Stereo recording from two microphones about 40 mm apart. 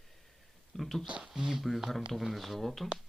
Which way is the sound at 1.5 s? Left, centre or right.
Centre.